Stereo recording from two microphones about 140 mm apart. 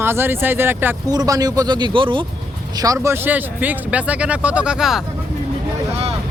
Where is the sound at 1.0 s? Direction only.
25° right (ahead or behind).